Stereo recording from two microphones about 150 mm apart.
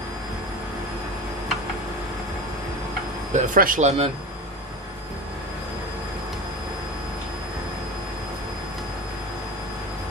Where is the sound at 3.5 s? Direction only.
65° right (ahead or behind).